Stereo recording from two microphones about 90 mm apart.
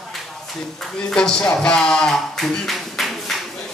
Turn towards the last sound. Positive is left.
turn(degrees=0)  # may be behind; listen again after turning